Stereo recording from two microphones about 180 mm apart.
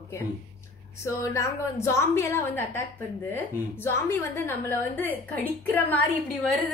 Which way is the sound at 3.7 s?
15° left (ahead or behind).